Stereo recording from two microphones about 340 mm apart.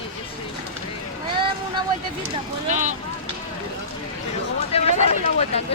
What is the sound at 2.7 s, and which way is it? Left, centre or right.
Speech, right.